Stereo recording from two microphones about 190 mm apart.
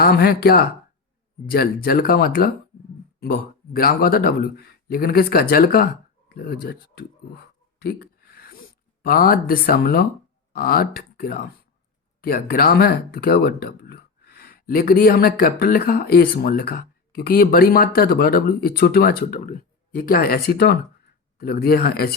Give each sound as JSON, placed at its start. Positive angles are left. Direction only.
{"t": 0.0, "sound": "speech", "side_deg": 55}
{"t": 6.3, "sound": "a sound", "side_deg": 55}
{"t": 9.0, "sound": "speech", "side_deg": 50}